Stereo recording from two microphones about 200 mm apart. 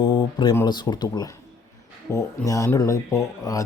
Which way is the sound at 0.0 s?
25° left (ahead or behind).